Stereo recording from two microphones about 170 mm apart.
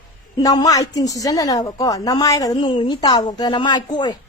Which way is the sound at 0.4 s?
20° left (ahead or behind).